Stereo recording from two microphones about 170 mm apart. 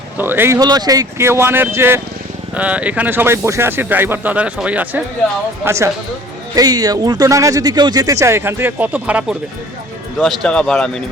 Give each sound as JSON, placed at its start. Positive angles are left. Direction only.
{"t": 0.2, "sound": "speech", "side_deg": -10}
{"t": 10.2, "sound": "speech", "side_deg": 5}